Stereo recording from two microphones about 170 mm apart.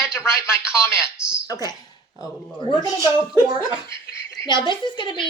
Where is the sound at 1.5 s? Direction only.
25° left (ahead or behind).